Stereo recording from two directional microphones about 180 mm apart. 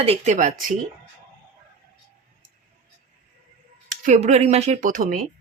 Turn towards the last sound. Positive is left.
turn(degrees=-45)  # may be behind; listen again after turning